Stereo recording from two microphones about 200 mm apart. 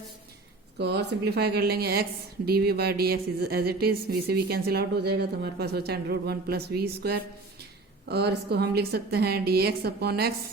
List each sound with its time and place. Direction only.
0.8 s speech: 55° right (ahead or behind)